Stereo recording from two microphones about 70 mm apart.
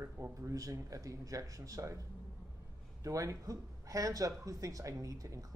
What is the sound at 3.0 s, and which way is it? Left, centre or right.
Speech, right.